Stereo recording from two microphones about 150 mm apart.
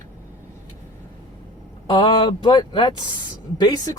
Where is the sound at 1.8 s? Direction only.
30° left (ahead or behind).